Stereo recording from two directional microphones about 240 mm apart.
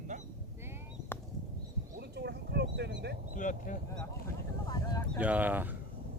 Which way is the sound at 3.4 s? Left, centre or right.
Left.